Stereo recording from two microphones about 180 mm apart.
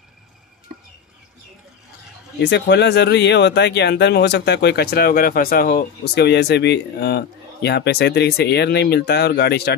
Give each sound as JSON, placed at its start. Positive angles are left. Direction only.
{"t": 2.4, "sound": "speech", "side_deg": 75}